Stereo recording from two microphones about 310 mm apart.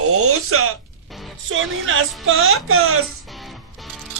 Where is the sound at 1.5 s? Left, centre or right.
Right.